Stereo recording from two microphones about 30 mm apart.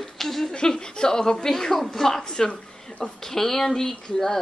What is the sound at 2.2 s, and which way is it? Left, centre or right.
Speech, left.